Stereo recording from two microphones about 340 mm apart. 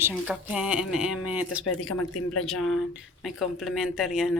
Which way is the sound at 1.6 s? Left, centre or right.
Left.